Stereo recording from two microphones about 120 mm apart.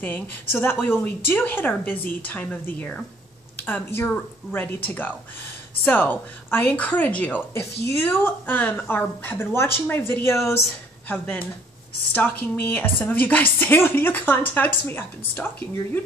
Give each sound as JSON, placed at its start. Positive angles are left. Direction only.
{"t": 0.0, "sound": "a woman's voice", "side_deg": 15}